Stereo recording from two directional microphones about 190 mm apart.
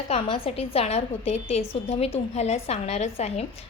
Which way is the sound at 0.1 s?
30° left (ahead or behind).